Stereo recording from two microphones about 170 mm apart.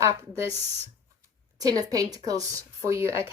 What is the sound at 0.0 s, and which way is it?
Speech, 20° right (ahead or behind).